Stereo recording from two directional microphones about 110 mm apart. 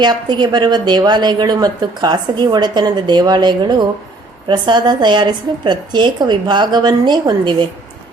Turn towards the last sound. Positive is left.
turn(degrees=-45)  # may be behind; listen again after turning